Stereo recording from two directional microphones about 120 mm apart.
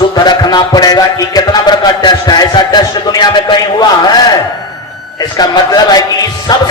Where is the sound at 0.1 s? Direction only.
35° left (ahead or behind).